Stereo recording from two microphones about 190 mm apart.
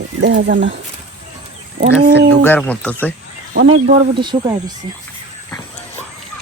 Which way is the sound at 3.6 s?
30° right (ahead or behind).